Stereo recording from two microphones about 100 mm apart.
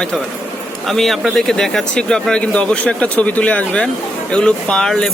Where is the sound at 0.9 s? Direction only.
Centre (ahead or behind).